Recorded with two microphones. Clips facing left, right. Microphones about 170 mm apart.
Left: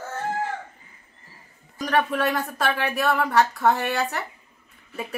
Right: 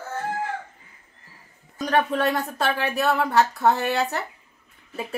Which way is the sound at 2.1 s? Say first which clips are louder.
Right 1 dB; 25° right (ahead or behind).